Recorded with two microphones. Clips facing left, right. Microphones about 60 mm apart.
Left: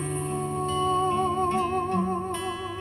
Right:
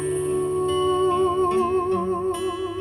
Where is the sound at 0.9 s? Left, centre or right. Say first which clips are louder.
Right 4 dB; left.